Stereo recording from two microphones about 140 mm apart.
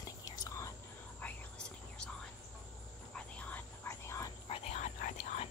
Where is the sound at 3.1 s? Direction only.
10° left (ahead or behind).